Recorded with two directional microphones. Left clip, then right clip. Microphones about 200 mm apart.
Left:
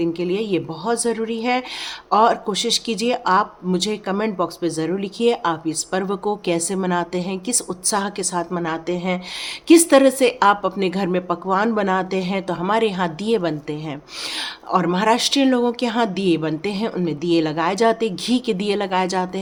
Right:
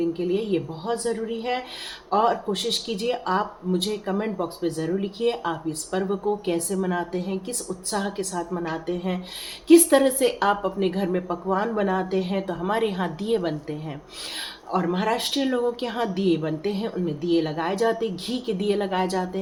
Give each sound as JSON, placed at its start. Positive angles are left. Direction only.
{"t": 0.0, "sound": "speech", "side_deg": 50}
{"t": 14.3, "sound": "speech", "side_deg": 50}